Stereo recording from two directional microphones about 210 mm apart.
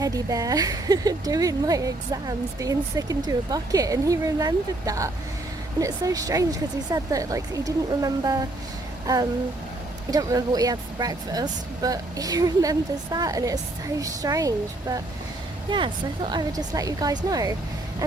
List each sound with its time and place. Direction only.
0.0 s speech: 15° right (ahead or behind)
10.1 s speech: 15° right (ahead or behind)